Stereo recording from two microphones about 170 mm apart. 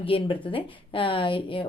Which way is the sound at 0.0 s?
30° left (ahead or behind).